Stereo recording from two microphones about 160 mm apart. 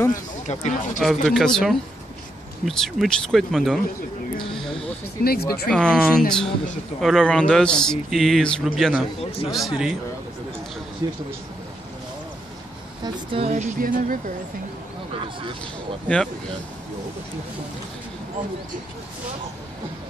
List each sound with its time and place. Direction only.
0.1 s speech: 45° left (ahead or behind)
0.9 s a man's voice: centre (ahead or behind)
4.6 s a sound: centre (ahead or behind)
5.2 s speech: 70° left (ahead or behind)
5.7 s a man's voice: 5° left (ahead or behind)
11.0 s speech: 20° right (ahead or behind)
13.0 s a sound: 35° right (ahead or behind)
13.7 s speech: 60° right (ahead or behind)